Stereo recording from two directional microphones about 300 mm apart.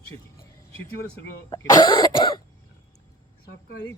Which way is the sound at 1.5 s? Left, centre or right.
Centre.